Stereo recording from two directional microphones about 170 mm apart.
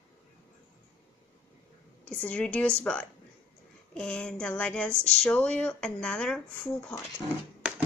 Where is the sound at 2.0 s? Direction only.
5° left (ahead or behind).